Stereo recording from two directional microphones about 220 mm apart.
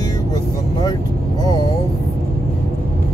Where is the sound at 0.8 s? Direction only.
20° left (ahead or behind).